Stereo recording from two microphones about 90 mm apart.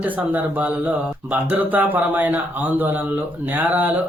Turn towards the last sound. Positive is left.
turn(degrees=-20)  # may be behind; listen again after turning